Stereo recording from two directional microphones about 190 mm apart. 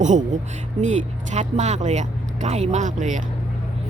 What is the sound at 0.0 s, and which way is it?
Speech, 40° right (ahead or behind).